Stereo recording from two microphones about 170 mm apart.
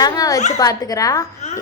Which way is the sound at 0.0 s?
20° left (ahead or behind).